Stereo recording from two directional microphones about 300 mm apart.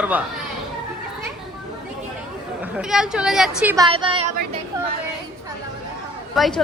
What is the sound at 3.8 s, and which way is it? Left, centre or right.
Speech, centre.